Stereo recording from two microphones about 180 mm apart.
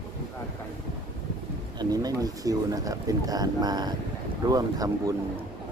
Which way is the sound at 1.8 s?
20° right (ahead or behind).